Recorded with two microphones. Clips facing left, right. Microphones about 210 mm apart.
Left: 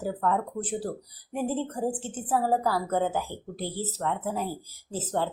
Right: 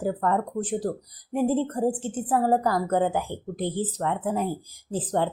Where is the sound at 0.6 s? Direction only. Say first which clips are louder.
Right 4 dB; 15° right (ahead or behind).